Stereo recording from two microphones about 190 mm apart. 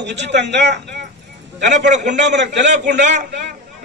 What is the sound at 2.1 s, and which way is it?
Speech, 70° right (ahead or behind).